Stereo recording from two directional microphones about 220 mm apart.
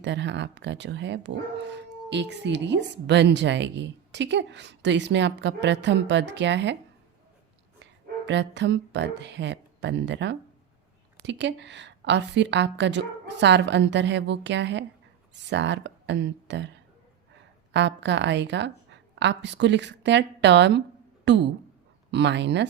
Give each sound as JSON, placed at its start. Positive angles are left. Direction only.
{"t": 0.0, "sound": "speech", "side_deg": -55}
{"t": 8.3, "sound": "speech", "side_deg": -55}
{"t": 17.7, "sound": "speech", "side_deg": -55}